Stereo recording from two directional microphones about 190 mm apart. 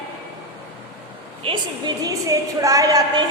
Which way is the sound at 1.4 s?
25° right (ahead or behind).